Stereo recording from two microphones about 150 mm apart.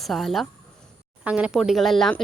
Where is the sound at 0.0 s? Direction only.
Centre (ahead or behind).